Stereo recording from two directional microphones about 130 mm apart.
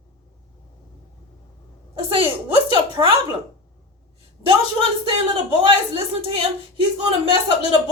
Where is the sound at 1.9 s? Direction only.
45° right (ahead or behind).